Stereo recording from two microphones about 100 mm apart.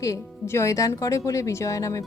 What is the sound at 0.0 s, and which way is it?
Speech, 30° left (ahead or behind).